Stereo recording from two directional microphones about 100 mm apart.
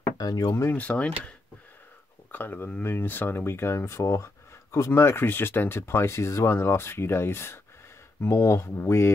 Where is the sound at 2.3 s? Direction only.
20° left (ahead or behind).